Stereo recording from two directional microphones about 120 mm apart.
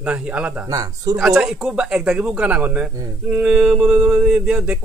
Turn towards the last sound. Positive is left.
turn(degrees=-5)  # may be behind; listen again after turning